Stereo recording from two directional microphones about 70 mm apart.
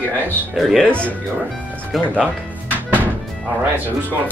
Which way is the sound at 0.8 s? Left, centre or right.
Centre.